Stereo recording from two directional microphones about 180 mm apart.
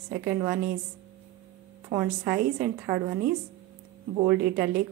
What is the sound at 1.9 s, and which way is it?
Speech, 15° right (ahead or behind).